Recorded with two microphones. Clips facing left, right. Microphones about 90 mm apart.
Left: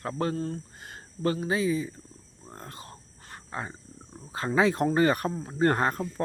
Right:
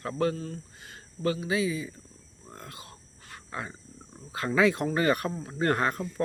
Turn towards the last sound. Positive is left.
turn(degrees=35)  # may be behind; listen again after turning